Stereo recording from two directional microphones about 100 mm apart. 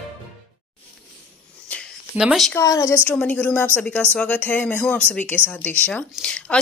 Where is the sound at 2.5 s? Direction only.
35° left (ahead or behind).